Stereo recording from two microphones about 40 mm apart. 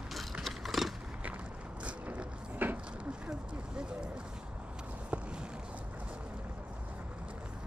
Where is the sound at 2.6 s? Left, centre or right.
Right.